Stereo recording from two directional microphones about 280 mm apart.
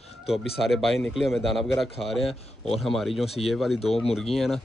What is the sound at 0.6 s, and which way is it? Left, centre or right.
Speech, centre.